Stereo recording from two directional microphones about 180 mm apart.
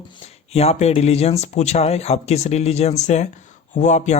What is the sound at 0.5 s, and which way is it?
Speech, 35° left (ahead or behind).